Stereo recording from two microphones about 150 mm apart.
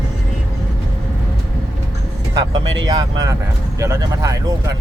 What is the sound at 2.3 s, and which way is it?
Speech, 25° right (ahead or behind).